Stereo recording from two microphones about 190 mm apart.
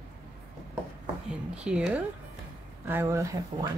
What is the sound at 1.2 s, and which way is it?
Speech, 5° right (ahead or behind).